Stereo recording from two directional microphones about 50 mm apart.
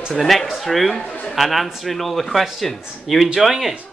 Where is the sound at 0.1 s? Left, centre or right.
Centre.